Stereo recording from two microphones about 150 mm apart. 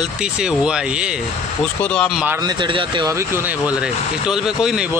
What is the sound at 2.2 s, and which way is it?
Speech, 25° right (ahead or behind).